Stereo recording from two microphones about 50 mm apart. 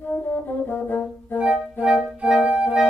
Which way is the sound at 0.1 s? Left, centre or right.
Left.